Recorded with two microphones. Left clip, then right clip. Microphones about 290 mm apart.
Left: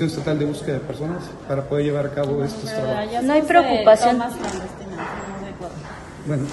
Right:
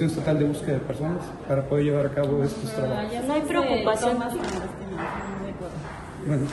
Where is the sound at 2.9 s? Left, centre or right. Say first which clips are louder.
Left 10 dB; left.